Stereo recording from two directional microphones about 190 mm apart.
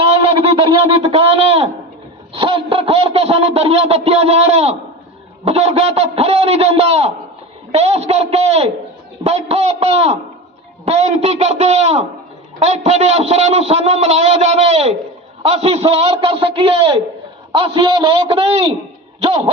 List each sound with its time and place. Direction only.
0.1 s a man's voice: 30° right (ahead or behind)